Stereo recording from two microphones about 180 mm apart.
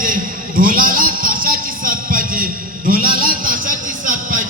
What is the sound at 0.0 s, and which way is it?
Music, 50° right (ahead or behind).